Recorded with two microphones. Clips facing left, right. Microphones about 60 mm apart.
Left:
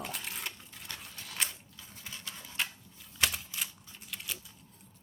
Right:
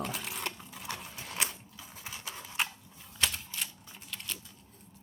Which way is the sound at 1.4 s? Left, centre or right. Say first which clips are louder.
Right 1 dB; centre.